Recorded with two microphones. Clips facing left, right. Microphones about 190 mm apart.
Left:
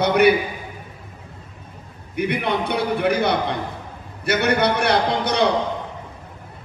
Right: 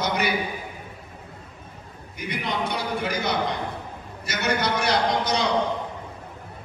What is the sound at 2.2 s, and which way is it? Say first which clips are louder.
A man's voice: left 7 dB; 60° left (ahead or behind).